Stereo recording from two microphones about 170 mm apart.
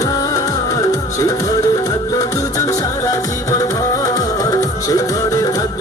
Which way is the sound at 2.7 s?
20° left (ahead or behind).